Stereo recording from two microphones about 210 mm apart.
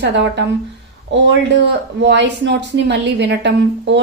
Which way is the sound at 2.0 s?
55° right (ahead or behind).